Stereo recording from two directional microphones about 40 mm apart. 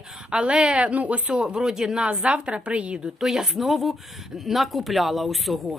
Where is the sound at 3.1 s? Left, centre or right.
Centre.